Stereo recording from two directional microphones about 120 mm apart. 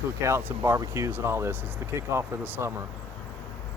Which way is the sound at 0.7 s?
25° right (ahead or behind).